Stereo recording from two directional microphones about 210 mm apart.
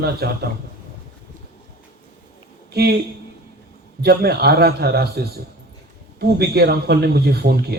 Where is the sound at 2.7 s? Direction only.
50° right (ahead or behind).